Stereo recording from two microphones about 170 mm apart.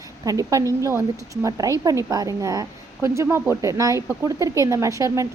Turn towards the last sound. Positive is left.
turn(degrees=-20)  # may be behind; listen again after turning